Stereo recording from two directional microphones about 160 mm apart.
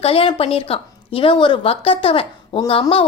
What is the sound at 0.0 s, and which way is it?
A woman's voice, 35° left (ahead or behind).